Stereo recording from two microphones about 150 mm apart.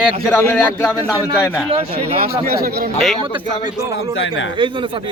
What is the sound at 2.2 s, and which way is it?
Speech, 90° right.